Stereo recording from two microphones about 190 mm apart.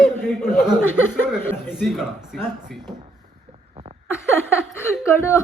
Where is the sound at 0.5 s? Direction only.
Centre (ahead or behind).